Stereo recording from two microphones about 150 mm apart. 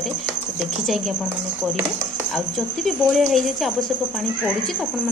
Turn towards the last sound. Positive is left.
turn(degrees=0)  # may be behind; listen again after turning